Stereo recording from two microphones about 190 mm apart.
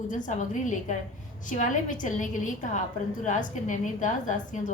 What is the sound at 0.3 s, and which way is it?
A woman's voice, 40° left (ahead or behind).